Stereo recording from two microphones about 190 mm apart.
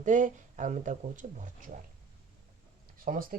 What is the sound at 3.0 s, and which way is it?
Speech, 50° right (ahead or behind).